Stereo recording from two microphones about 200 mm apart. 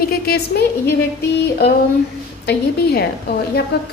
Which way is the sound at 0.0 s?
50° left (ahead or behind).